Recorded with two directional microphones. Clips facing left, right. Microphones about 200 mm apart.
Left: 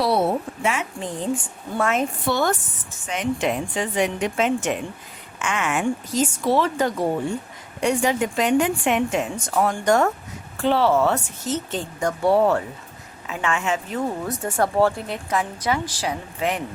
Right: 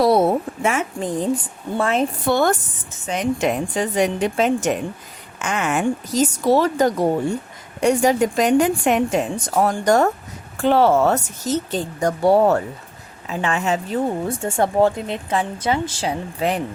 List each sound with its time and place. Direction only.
0.0 s a sound: 45° right (ahead or behind)
1.8 s a woman's voice: 35° right (ahead or behind)
2.2 s a woman's voice: 50° right (ahead or behind)
10.6 s a woman's voice: 45° right (ahead or behind)